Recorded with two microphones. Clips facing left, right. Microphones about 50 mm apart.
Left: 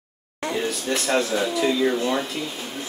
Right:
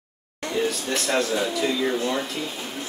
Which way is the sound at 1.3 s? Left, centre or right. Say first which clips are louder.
Left 2 dB; centre.